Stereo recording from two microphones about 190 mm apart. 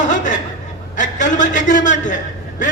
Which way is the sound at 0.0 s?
40° left (ahead or behind).